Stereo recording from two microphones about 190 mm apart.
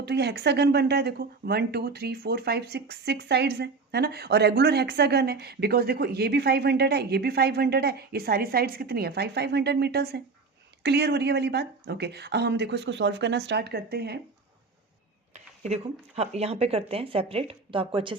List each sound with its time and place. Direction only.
0.0 s speech: 60° right (ahead or behind)
15.7 s speech: 35° right (ahead or behind)